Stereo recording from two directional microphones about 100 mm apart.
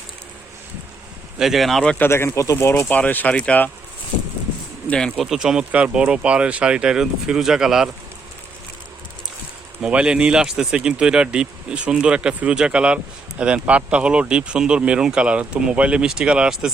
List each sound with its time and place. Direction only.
1.4 s speech: centre (ahead or behind)
2.0 s speech: 25° left (ahead or behind)
4.9 s speech: 10° left (ahead or behind)
9.8 s speech: 10° right (ahead or behind)